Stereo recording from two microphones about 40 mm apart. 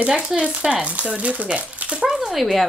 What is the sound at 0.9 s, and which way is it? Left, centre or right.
Speech, right.